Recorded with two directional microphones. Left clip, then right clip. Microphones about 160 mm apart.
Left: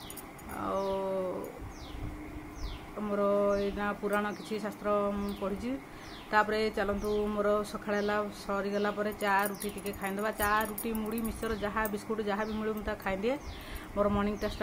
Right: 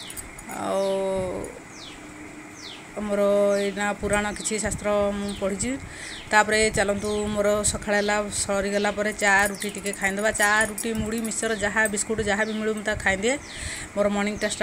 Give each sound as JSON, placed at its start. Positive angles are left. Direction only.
{"t": 0.6, "sound": "a sound", "side_deg": -20}
{"t": 3.1, "sound": "speech", "side_deg": -20}
{"t": 6.3, "sound": "speech", "side_deg": -20}